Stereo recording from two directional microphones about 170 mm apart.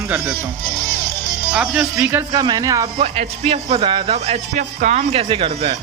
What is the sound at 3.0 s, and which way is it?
Speech, 35° right (ahead or behind).